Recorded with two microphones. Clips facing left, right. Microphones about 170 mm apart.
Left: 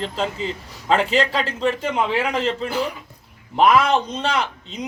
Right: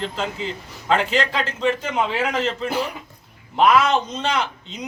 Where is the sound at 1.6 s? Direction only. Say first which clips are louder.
Even; centre (ahead or behind).